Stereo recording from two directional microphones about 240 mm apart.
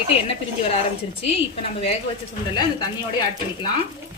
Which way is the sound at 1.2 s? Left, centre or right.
Left.